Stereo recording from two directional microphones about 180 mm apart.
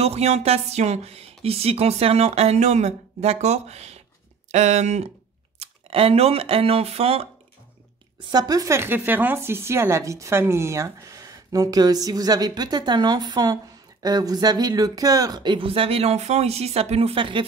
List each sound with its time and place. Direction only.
0.0 s speech: 35° right (ahead or behind)
8.3 s speech: 20° right (ahead or behind)